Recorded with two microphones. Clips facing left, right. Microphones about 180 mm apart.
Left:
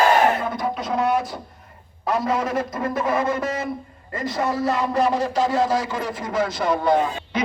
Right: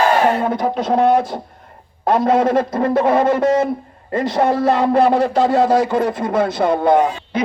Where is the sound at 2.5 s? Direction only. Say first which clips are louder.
Right 8 dB; 60° right (ahead or behind).